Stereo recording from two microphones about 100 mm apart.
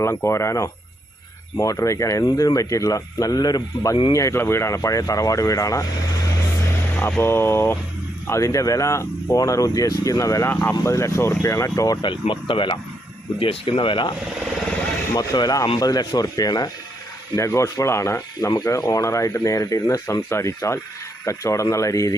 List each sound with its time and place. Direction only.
0.3 s speech: 30° left (ahead or behind)
4.1 s speech: 30° left (ahead or behind)
6.9 s speech: 25° left (ahead or behind)
10.5 s speech: 20° left (ahead or behind)
10.9 s speech: 30° left (ahead or behind)
12.3 s speech: 55° left (ahead or behind)
15.1 s speech: 35° left (ahead or behind)
17.3 s speech: 30° left (ahead or behind)